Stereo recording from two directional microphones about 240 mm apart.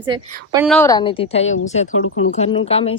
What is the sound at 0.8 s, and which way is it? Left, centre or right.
A woman's voice, centre.